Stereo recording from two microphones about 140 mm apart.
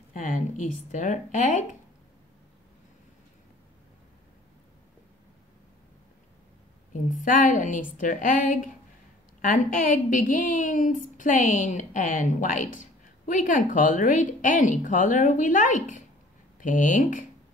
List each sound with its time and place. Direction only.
0.1 s a woman's voice: 70° left (ahead or behind)
6.9 s a woman's voice: 65° left (ahead or behind)